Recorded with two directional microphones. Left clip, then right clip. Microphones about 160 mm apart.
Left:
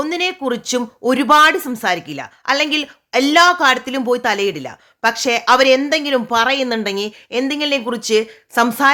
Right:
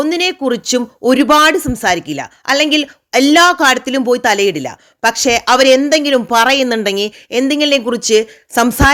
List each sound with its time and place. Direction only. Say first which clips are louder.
0.0 s speech: right 5 dB; 30° right (ahead or behind)